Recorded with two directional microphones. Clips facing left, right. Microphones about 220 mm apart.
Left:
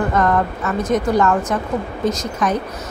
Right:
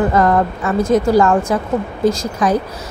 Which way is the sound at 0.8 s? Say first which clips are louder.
Right 4 dB; 25° right (ahead or behind).